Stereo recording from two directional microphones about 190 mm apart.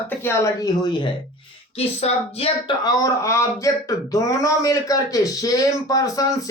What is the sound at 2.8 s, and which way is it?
Speech, 15° left (ahead or behind).